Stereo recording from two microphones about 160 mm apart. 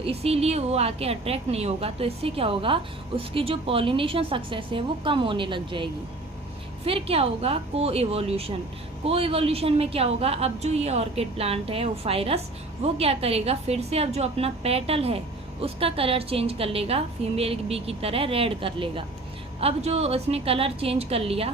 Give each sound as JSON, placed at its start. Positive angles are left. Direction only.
{"t": 0.0, "sound": "a woman's voice", "side_deg": -40}